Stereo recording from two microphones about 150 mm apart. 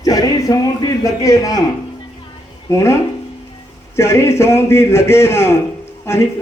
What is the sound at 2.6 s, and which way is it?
A man's voice, 20° left (ahead or behind).